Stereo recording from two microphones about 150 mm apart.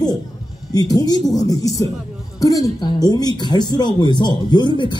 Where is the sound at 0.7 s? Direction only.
25° left (ahead or behind).